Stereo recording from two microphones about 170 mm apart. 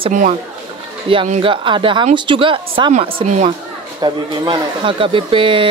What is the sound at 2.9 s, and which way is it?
Speech, 45° right (ahead or behind).